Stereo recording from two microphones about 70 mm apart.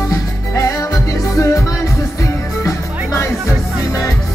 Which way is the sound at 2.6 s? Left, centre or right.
Left.